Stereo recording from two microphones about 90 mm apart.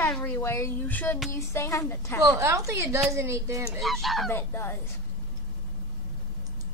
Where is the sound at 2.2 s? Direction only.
35° right (ahead or behind).